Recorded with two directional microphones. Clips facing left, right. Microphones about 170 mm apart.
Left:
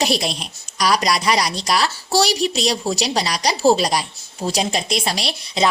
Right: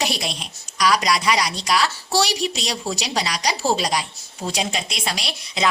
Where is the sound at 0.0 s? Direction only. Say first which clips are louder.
Left 5 dB; 35° left (ahead or behind).